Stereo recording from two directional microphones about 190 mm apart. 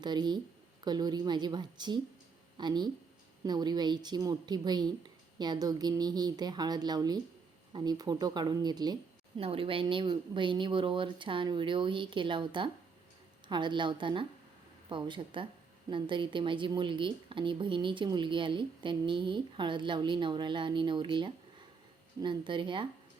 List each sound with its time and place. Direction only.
0.0 s speech: 20° right (ahead or behind)